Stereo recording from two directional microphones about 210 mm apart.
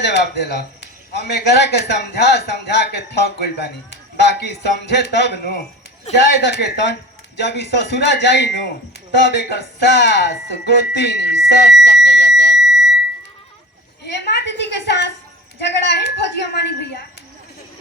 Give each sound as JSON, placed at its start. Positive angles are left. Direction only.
{"t": 0.0, "sound": "a man's voice", "side_deg": 55}
{"t": 12.5, "sound": "alarm", "side_deg": 0}
{"t": 14.0, "sound": "a man's voice", "side_deg": 55}